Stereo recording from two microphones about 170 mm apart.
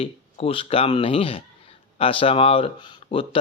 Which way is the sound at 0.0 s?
35° left (ahead or behind).